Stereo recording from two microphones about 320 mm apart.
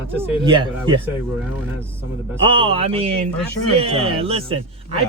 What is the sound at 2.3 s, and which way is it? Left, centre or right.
Speech, centre.